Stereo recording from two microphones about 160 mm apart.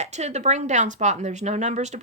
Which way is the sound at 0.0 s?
45° right (ahead or behind).